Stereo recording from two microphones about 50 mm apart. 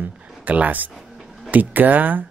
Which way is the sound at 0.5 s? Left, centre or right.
Right.